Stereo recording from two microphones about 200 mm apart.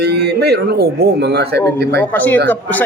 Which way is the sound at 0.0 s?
55° right (ahead or behind).